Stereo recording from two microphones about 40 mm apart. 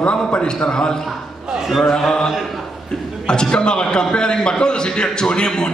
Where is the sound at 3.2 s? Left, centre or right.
Left.